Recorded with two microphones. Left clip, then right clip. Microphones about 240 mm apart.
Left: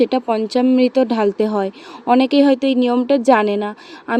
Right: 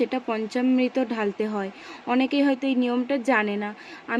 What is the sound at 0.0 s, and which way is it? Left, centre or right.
Speech, left.